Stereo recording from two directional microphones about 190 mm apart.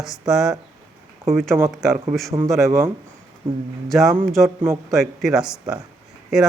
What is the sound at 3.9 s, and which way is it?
A man's voice, centre (ahead or behind).